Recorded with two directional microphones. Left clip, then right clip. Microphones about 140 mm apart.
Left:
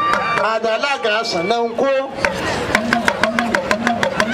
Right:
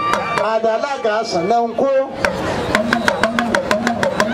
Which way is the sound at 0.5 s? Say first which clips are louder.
Right 1 dB; 35° left (ahead or behind).